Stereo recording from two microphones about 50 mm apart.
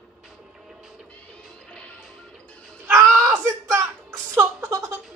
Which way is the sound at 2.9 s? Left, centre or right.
Right.